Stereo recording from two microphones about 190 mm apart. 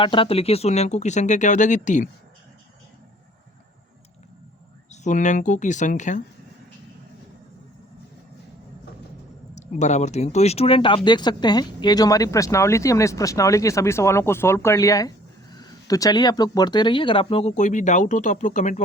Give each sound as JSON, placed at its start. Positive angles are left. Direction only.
{"t": 0.0, "sound": "speech", "side_deg": 25}
{"t": 4.9, "sound": "speech", "side_deg": 40}
{"t": 9.6, "sound": "speech", "side_deg": 35}